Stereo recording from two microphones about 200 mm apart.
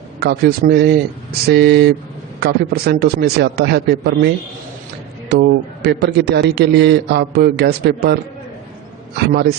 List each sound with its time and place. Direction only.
0.2 s a man's voice: 50° right (ahead or behind)
5.3 s a man's voice: 55° right (ahead or behind)